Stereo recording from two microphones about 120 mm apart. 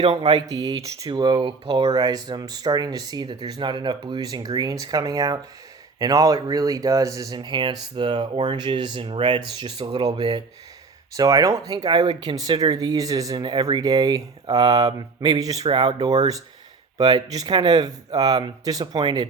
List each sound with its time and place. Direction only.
0.0 s speech: 45° right (ahead or behind)
0.4 s speech: 35° right (ahead or behind)